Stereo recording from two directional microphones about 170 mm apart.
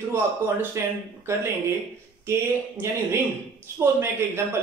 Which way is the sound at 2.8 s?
15° right (ahead or behind).